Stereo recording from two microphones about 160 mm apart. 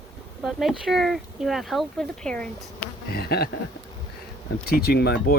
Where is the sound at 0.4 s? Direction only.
Centre (ahead or behind).